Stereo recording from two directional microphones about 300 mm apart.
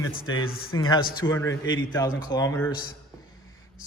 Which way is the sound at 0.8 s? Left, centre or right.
Centre.